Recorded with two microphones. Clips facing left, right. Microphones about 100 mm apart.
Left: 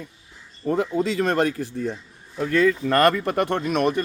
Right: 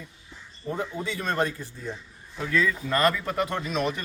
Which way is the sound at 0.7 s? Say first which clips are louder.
Left 8 dB; 90° left.